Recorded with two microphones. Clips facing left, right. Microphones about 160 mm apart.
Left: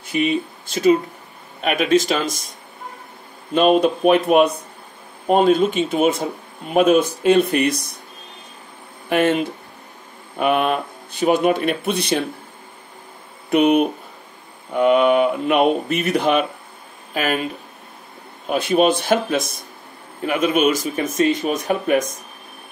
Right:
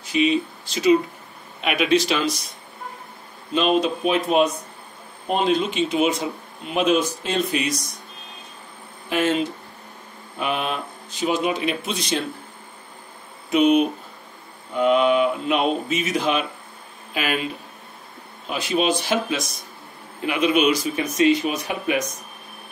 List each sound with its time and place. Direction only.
0.0 s speech: 55° left (ahead or behind)
3.5 s speech: 50° left (ahead or behind)
5.2 s speech: 50° left (ahead or behind)
9.1 s speech: 55° left (ahead or behind)
13.5 s speech: 55° left (ahead or behind)
17.1 s speech: 45° left (ahead or behind)
18.5 s speech: 55° left (ahead or behind)